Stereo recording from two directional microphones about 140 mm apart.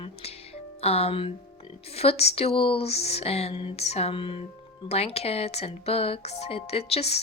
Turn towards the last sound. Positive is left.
turn(degrees=45)  # may be behind; listen again after turning